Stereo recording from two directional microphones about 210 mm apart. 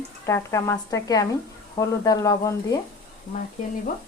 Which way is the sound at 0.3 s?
15° left (ahead or behind).